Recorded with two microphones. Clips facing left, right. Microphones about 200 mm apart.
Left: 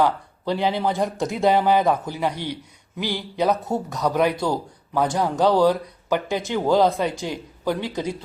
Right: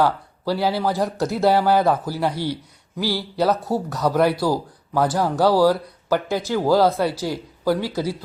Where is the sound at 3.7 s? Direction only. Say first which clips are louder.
Right 2 dB; 5° right (ahead or behind).